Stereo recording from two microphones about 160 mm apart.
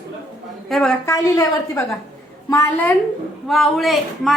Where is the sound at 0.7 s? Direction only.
5° left (ahead or behind).